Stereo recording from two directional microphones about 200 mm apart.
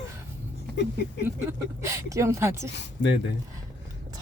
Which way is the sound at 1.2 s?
15° right (ahead or behind).